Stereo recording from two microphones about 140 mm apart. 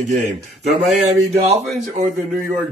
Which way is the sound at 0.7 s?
55° right (ahead or behind).